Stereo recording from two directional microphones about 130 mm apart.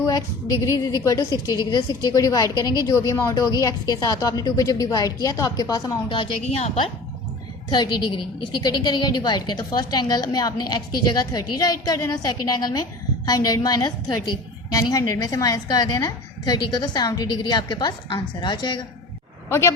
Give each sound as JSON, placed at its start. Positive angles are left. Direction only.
{"t": 0.6, "sound": "a woman's voice", "side_deg": 25}
{"t": 7.7, "sound": "a woman's voice", "side_deg": 35}
{"t": 19.5, "sound": "a woman's voice", "side_deg": 20}